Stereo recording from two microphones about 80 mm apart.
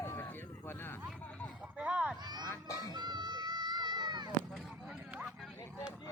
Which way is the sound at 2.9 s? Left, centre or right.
Right.